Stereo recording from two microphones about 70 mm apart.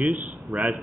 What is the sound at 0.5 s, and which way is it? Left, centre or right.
Speech, centre.